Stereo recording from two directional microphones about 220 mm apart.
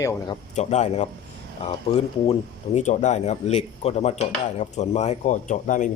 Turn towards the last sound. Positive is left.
turn(degrees=35)  # may be behind; listen again after turning